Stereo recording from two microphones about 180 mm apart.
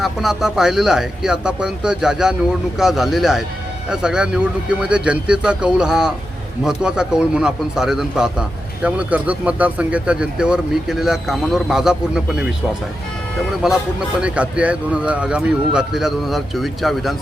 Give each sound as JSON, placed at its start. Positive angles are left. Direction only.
{"t": 0.0, "sound": "a man's voice", "side_deg": 0}
{"t": 13.6, "sound": "a man's voice", "side_deg": -5}